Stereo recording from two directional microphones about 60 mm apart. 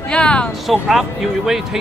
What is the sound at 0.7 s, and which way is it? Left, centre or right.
Speech, centre.